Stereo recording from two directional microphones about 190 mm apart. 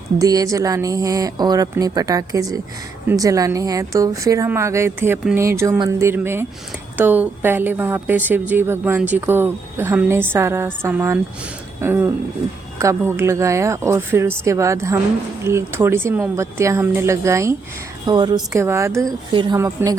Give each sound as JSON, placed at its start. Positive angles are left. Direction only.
{"t": 0.2, "sound": "a woman's voice", "side_deg": -20}